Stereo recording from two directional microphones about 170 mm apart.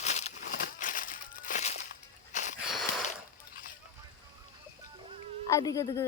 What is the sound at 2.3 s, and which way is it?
Wheeze, 45° left (ahead or behind).